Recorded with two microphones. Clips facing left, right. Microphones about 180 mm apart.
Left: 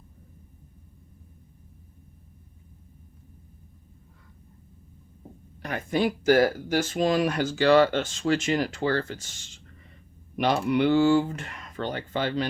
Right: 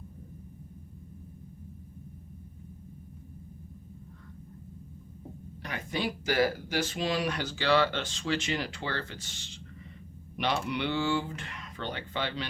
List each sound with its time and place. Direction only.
5.6 s speech: 50° left (ahead or behind)